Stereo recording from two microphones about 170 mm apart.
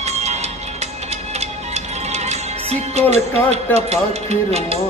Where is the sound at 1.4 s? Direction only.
40° right (ahead or behind).